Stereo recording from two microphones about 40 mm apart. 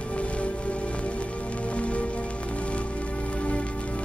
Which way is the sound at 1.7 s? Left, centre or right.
Left.